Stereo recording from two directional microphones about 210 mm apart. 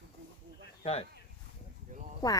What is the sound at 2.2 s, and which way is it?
Speech, 15° left (ahead or behind).